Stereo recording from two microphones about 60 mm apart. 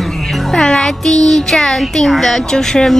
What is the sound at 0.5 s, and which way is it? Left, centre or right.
A woman's voice, centre.